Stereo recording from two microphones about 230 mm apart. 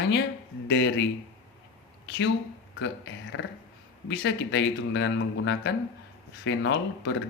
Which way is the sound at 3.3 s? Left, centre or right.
Left.